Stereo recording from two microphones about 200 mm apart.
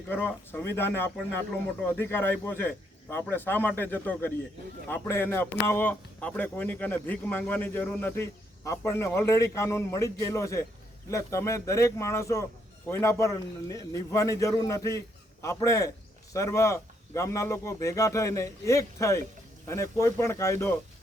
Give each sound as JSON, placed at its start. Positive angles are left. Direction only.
{"t": 0.1, "sound": "a man's voice", "side_deg": 10}